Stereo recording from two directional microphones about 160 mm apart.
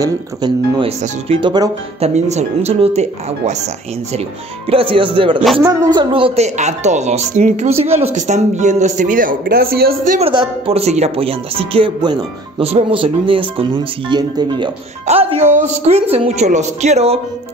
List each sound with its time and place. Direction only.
0.0 s speech: 25° right (ahead or behind)
0.8 s speech: 35° right (ahead or behind)
2.0 s a woman's voice: 40° right (ahead or behind)
4.6 s a woman's voice: 35° right (ahead or behind); by 10.1 s 70° right (ahead or behind)
10.3 s speech: 35° right (ahead or behind)
15.0 s a woman's voice: 40° right (ahead or behind)